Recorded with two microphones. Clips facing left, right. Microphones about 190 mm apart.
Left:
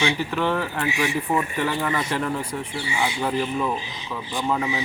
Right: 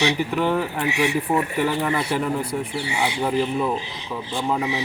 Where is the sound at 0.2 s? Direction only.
10° right (ahead or behind).